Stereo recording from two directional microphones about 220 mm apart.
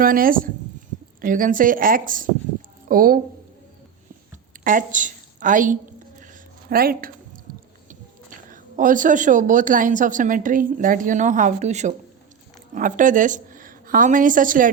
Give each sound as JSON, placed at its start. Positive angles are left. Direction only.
{"t": 0.0, "sound": "speech", "side_deg": -40}
{"t": 4.6, "sound": "a woman's voice", "side_deg": -40}
{"t": 6.1, "sound": "a sound", "side_deg": -35}
{"t": 8.4, "sound": "a woman's voice", "side_deg": -35}